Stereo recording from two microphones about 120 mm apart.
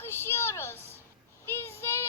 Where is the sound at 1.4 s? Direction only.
20° left (ahead or behind).